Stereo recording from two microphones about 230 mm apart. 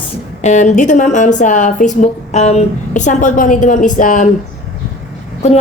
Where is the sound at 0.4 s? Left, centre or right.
Left.